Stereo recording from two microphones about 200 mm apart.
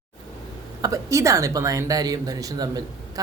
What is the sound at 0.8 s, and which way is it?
Speech, 15° right (ahead or behind).